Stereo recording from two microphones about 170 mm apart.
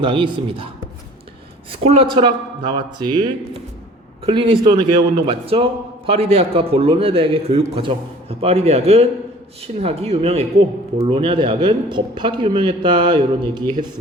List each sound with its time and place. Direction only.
0.0 s a man's voice: 30° right (ahead or behind)
1.7 s a man's voice: 35° right (ahead or behind)
4.3 s a man's voice: 30° right (ahead or behind)